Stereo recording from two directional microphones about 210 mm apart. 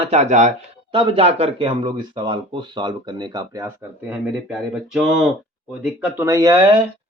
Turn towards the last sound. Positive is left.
turn(degrees=-15)  # may be behind; listen again after turning